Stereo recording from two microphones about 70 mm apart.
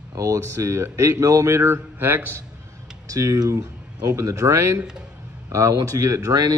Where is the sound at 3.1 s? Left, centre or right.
Right.